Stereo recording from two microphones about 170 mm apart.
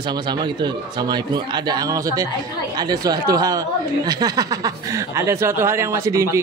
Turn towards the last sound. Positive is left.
turn(degrees=-15)  # may be behind; listen again after turning